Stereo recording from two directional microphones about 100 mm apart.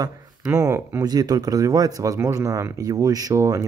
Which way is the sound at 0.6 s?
30° right (ahead or behind).